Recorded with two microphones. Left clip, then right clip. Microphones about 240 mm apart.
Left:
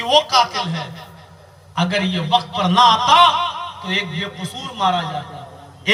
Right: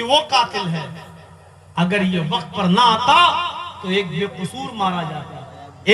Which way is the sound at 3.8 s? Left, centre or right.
Right.